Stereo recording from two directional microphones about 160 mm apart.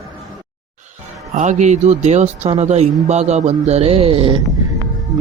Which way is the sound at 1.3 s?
50° right (ahead or behind).